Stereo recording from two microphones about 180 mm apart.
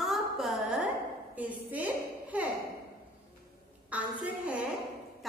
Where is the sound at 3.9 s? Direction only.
5° right (ahead or behind).